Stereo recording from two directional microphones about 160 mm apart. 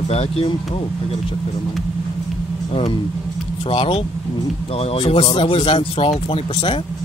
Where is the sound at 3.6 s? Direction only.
35° left (ahead or behind).